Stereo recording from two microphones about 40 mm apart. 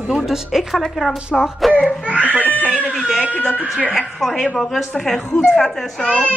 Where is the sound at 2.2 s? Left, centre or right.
Left.